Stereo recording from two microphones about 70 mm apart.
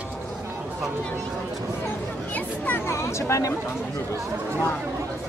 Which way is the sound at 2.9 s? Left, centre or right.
Left.